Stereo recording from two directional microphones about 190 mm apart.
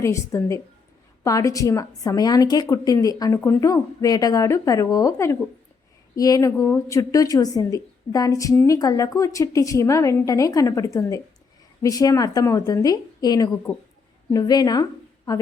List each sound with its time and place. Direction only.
0.0 s a woman's voice: 15° left (ahead or behind)